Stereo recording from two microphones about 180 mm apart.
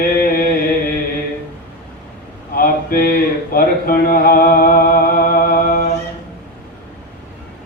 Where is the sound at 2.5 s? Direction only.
55° left (ahead or behind).